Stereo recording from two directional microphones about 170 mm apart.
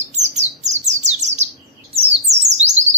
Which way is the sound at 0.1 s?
40° right (ahead or behind).